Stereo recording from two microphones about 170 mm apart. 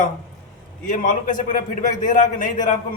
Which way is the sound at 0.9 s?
50° left (ahead or behind).